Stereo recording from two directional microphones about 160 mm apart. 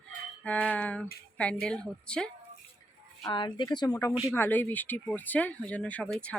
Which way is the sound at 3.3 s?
30° left (ahead or behind).